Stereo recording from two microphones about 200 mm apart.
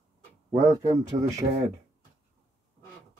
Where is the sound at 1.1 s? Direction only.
25° right (ahead or behind).